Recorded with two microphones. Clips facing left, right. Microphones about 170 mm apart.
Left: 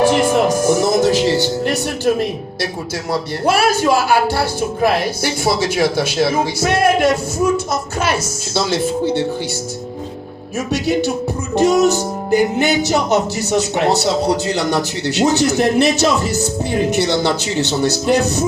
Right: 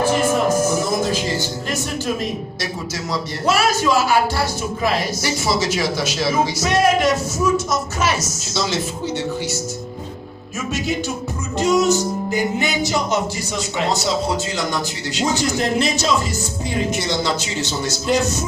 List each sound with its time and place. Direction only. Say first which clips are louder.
0.0 s speech: left 4 dB; 80° left; by 8.8 s 55° left (ahead or behind)
10.7 s speech: left 6 dB; 65° left (ahead or behind)